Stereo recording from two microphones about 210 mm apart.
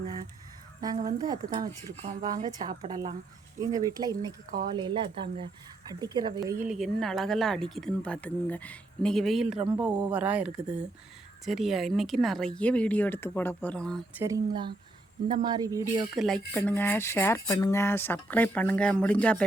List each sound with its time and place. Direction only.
1.0 s speech: 20° right (ahead or behind)
6.7 s speech: centre (ahead or behind)
9.8 s speech: 20° right (ahead or behind)
10.2 s speech: 5° right (ahead or behind)
14.2 s speech: 15° right (ahead or behind)
16.1 s speech: centre (ahead or behind)